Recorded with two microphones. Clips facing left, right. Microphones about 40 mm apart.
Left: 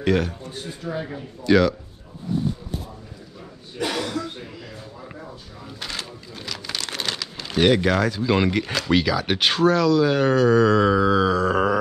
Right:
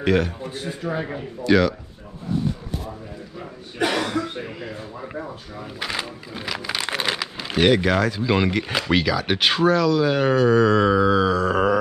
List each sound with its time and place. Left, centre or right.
0.0 s speech: centre
0.8 s a man's voice: right
1.4 s speech: centre
3.8 s speech: right; by 7.6 s centre
7.6 s speech: centre